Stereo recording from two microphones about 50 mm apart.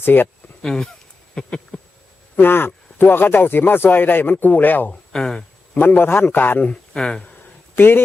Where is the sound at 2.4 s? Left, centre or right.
Left.